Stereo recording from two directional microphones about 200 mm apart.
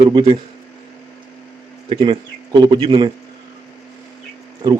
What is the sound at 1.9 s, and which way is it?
Speech, 25° right (ahead or behind).